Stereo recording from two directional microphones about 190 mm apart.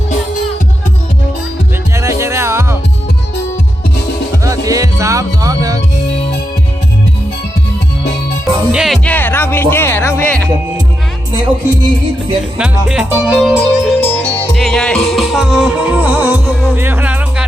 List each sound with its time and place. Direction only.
2.0 s music: 15° right (ahead or behind)
4.4 s music: 20° right (ahead or behind)
8.7 s music: 5° right (ahead or behind)
9.0 s music: 10° left (ahead or behind)
12.5 s music: 5° right (ahead or behind)